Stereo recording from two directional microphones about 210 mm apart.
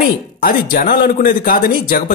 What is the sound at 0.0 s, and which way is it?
A man's voice, 45° left (ahead or behind).